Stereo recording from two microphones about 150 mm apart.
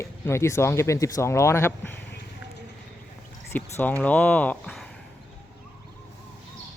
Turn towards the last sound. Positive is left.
turn(degrees=10)  # may be behind; listen again after turning